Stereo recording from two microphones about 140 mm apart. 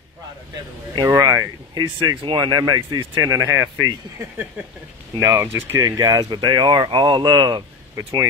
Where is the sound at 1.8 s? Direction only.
35° right (ahead or behind).